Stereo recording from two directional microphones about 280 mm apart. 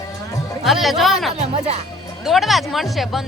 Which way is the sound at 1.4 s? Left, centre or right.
Right.